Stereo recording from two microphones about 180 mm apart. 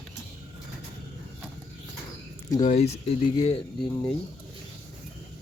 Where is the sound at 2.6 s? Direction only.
40° left (ahead or behind).